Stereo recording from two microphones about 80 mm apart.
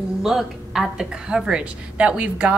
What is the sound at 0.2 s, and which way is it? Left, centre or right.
A woman's voice, centre.